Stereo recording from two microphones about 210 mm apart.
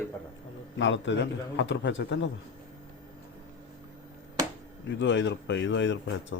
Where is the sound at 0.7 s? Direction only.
60° left (ahead or behind).